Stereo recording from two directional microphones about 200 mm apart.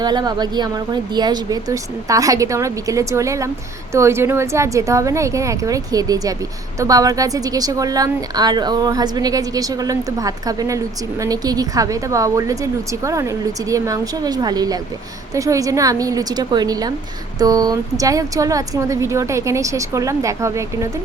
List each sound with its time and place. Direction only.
0.0 s a woman's voice: 20° right (ahead or behind)